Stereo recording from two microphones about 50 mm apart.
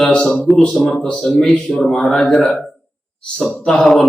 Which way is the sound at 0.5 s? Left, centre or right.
Centre.